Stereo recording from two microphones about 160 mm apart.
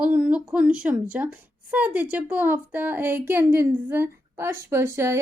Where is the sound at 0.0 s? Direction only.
5° right (ahead or behind).